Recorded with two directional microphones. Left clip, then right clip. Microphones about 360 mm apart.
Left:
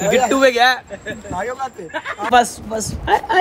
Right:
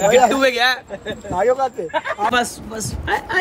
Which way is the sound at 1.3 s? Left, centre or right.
Centre.